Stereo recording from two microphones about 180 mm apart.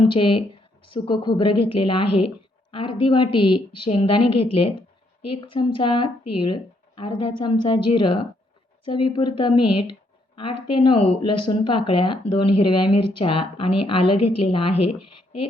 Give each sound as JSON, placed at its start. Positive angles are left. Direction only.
{"t": 0.0, "sound": "a woman's voice", "side_deg": 30}